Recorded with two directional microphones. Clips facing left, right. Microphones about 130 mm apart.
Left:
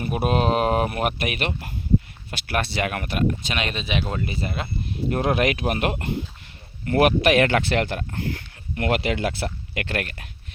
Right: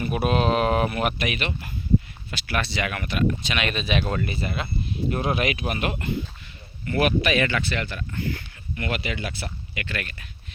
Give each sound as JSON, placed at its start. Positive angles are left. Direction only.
{"t": 0.0, "sound": "speech", "side_deg": 40}
{"t": 3.7, "sound": "speech", "side_deg": 20}
{"t": 4.4, "sound": "speech", "side_deg": 40}
{"t": 5.1, "sound": "speech", "side_deg": 70}